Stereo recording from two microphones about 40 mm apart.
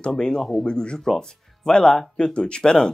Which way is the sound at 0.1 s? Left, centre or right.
Centre.